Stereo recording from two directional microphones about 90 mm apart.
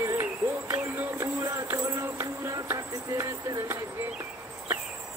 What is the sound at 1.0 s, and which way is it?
Music, 30° right (ahead or behind).